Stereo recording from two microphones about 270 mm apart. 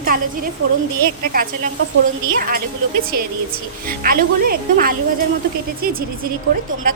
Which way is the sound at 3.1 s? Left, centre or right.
Right.